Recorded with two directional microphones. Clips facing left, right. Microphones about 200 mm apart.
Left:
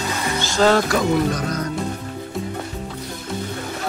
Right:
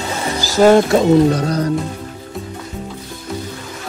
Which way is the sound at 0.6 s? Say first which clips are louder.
Right 7 dB; 20° right (ahead or behind).